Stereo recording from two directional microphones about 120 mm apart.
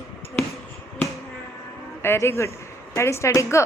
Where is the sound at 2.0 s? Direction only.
20° left (ahead or behind).